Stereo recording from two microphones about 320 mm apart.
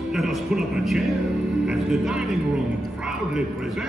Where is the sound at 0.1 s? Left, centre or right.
Centre.